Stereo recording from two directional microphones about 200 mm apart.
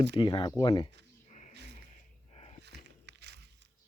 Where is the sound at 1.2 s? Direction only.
35° left (ahead or behind).